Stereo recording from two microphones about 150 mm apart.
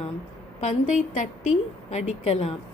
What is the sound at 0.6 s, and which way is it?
A woman's voice, 55° left (ahead or behind).